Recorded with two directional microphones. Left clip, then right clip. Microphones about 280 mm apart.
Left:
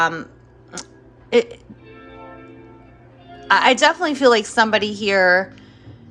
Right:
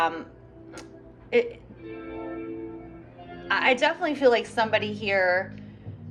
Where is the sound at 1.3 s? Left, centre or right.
Left.